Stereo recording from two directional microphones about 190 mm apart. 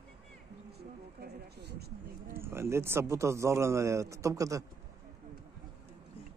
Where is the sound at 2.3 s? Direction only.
15° right (ahead or behind).